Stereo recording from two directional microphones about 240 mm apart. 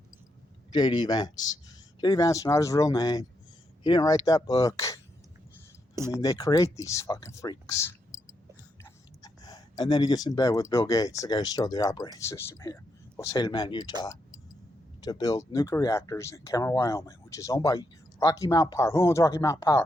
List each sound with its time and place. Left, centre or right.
0.7 s speech: centre
6.1 s speech: centre
8.8 s a sound: centre
11.2 s speech: centre
15.0 s speech: centre